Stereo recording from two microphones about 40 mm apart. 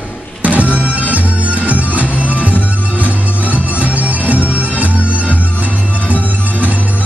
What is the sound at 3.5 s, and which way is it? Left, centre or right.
Bagpipes, right.